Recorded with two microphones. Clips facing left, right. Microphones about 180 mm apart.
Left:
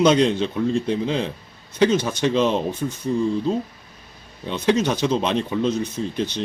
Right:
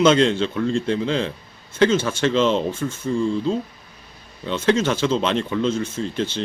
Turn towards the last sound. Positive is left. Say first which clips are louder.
# even
turn(degrees=10)  # may be behind; listen again after turning